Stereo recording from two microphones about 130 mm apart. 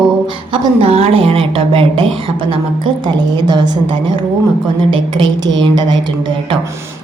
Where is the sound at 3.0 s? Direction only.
35° right (ahead or behind).